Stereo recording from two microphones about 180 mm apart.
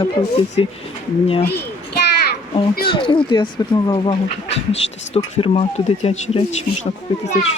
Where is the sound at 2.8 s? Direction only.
25° left (ahead or behind).